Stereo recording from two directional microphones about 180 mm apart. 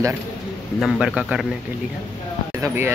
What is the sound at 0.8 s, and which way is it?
Speech, 5° right (ahead or behind).